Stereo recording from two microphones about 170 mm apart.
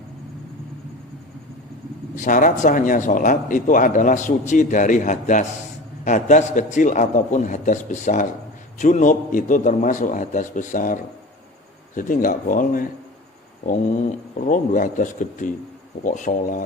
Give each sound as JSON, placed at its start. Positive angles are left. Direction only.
{"t": 2.1, "sound": "speech", "side_deg": 50}